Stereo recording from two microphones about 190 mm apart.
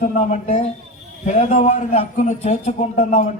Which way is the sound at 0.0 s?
40° left (ahead or behind).